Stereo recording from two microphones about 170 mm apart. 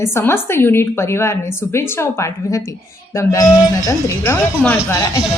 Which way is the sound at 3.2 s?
20° left (ahead or behind).